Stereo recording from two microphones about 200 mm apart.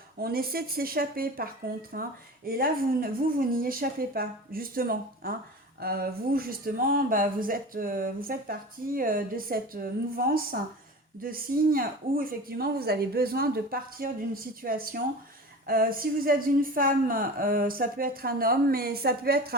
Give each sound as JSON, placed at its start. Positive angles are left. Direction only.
{"t": 0.2, "sound": "speech", "side_deg": -50}